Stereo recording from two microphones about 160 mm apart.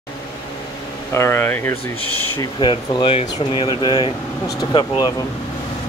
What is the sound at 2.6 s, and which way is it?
Speech, 30° left (ahead or behind).